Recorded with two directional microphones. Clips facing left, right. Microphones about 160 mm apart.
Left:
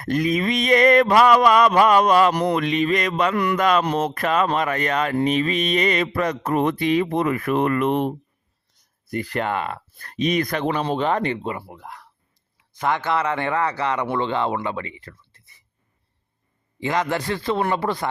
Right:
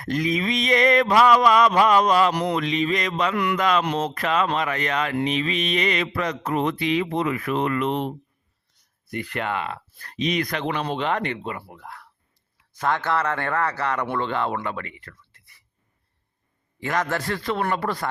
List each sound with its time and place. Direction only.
0.0 s speech: 50° left (ahead or behind)
9.0 s speech: 35° left (ahead or behind)
10.7 s speech: 35° left (ahead or behind)
11.5 s speech: 20° left (ahead or behind)
16.8 s speech: 20° left (ahead or behind)